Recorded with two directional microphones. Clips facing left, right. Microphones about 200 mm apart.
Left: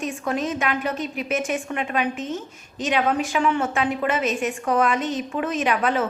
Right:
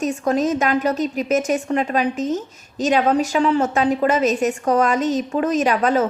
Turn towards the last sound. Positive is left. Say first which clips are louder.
# right 5 dB
turn(degrees=-40)  # may be behind; listen again after turning